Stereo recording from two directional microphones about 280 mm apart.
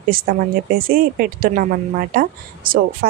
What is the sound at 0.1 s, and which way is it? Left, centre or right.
A woman's voice, right.